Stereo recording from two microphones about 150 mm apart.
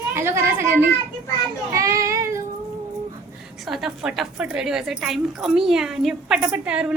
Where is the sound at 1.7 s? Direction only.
20° right (ahead or behind).